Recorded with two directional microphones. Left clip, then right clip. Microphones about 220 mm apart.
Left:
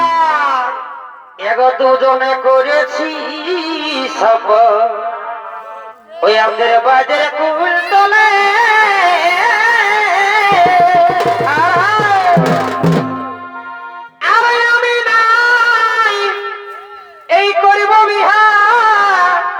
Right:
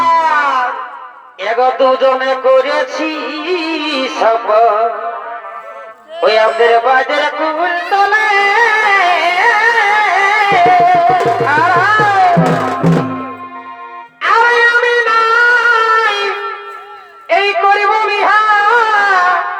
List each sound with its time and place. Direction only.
0.0 s music: 30° left (ahead or behind)
1.4 s a sound: 20° left (ahead or behind)
6.2 s music: 15° left (ahead or behind)
12.5 s music: 40° left (ahead or behind)
14.2 s music: 15° left (ahead or behind)
17.2 s a sound: 15° left (ahead or behind)